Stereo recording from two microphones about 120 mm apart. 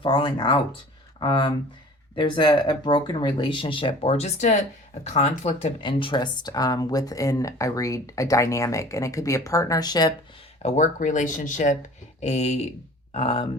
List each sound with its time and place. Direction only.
0.0 s speech: 45° left (ahead or behind); by 5.7 s 65° left (ahead or behind)
5.8 s speech: 45° left (ahead or behind)
10.6 s speech: 80° left
12.2 s speech: 70° left (ahead or behind)
13.1 s speech: 55° left (ahead or behind)